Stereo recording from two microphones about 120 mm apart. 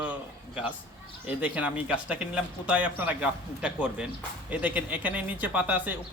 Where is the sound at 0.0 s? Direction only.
10° right (ahead or behind).